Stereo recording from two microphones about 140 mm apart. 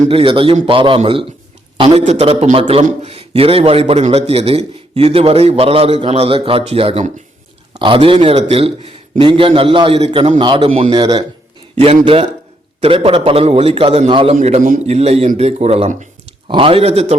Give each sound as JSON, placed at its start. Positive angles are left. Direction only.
{"t": 0.1, "sound": "a man's voice", "side_deg": -40}
{"t": 10.4, "sound": "a man's voice", "side_deg": -35}
{"t": 14.3, "sound": "a man's voice", "side_deg": -55}
{"t": 16.5, "sound": "a man's voice", "side_deg": -40}